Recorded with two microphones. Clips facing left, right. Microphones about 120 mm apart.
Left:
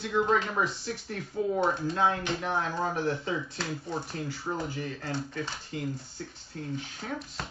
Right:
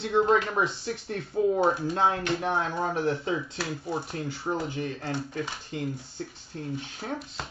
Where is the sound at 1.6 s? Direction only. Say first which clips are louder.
Right 3 dB; 10° right (ahead or behind).